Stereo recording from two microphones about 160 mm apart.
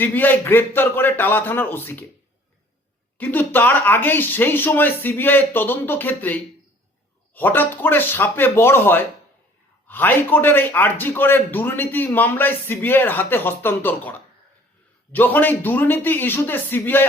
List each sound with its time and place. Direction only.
0.0 s a man's voice: 10° left (ahead or behind)
3.2 s a man's voice: 10° left (ahead or behind)